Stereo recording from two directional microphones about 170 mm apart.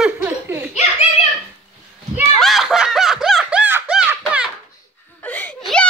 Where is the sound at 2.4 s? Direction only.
Centre (ahead or behind).